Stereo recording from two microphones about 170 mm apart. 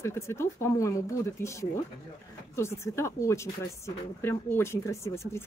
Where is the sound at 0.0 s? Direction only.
15° left (ahead or behind).